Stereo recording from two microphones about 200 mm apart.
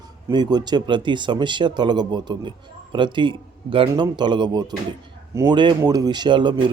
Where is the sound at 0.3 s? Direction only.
20° right (ahead or behind).